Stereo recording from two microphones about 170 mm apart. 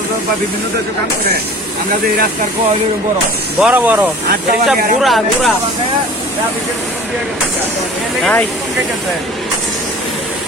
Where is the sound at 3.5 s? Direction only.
5° right (ahead or behind).